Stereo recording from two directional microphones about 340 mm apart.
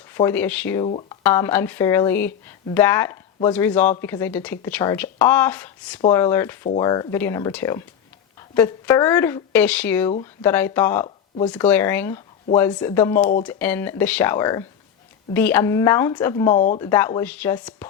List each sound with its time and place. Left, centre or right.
0.1 s speech: centre
16.5 s speech: left
16.7 s speech: centre